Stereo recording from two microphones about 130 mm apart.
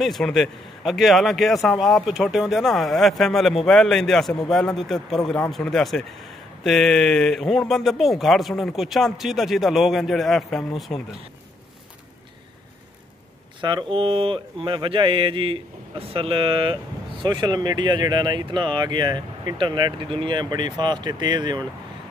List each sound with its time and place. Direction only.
0.0 s speech: centre (ahead or behind)
13.6 s speech: 35° right (ahead or behind)